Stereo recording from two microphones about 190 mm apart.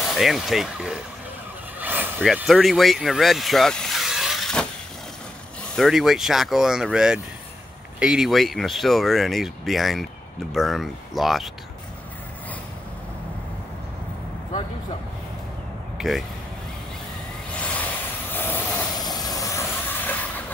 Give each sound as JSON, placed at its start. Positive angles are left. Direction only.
{"t": 0.0, "sound": "speech", "side_deg": 0}
{"t": 5.8, "sound": "speech", "side_deg": 0}
{"t": 16.0, "sound": "speech", "side_deg": 0}
{"t": 18.3, "sound": "vehicle", "side_deg": 10}
{"t": 18.9, "sound": "vehicle", "side_deg": 20}